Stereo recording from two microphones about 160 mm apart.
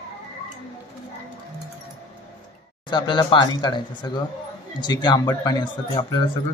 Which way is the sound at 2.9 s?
30° left (ahead or behind).